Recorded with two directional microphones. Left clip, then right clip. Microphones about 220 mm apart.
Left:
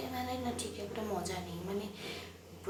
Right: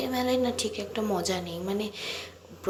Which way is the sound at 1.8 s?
30° right (ahead or behind).